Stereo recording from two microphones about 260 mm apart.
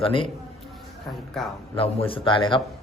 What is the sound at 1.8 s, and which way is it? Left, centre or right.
Speech, left.